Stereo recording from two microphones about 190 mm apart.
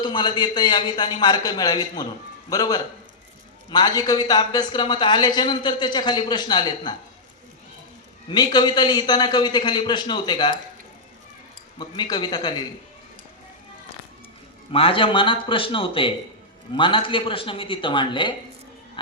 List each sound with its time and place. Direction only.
0.0 s speech: 25° left (ahead or behind)
8.3 s speech: 20° left (ahead or behind)
11.8 s speech: 20° left (ahead or behind)
14.7 s speech: 30° left (ahead or behind)